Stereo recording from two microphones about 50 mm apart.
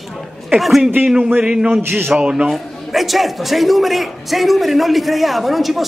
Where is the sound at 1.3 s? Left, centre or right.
Centre.